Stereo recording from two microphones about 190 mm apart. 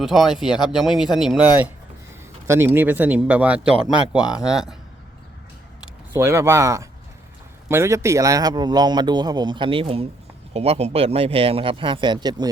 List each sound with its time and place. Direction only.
0.0 s speech: centre (ahead or behind)
4.2 s speech: 20° left (ahead or behind)
4.4 s speech: 5° right (ahead or behind)
6.1 s a man's voice: 15° right (ahead or behind)